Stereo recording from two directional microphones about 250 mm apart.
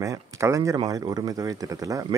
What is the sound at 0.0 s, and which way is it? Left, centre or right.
Speech, centre.